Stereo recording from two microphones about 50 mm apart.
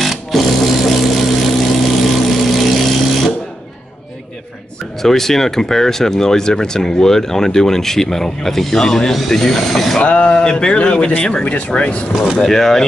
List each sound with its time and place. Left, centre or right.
0.0 s vehicle: centre
5.0 s speech: centre
10.0 s speech: left
10.3 s speech: centre
12.1 s speech: centre
12.4 s speech: centre